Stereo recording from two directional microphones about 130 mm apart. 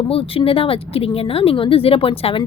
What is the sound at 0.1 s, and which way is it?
A woman's voice, 45° left (ahead or behind).